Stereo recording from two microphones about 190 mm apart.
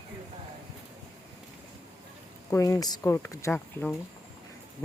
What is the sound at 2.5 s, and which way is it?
Speech, 15° left (ahead or behind).